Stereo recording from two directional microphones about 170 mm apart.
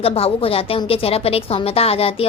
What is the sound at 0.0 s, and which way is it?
A woman's voice, 35° left (ahead or behind).